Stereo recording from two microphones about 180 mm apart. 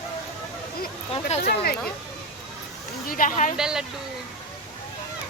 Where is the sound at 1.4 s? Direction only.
60° left (ahead or behind).